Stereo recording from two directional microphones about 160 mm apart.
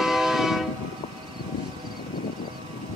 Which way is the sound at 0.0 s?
Centre (ahead or behind).